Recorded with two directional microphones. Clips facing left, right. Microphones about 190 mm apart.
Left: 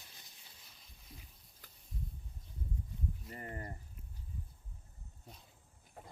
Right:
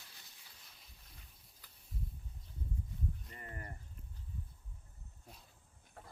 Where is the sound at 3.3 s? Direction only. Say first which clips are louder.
Left 5 dB; 30° left (ahead or behind).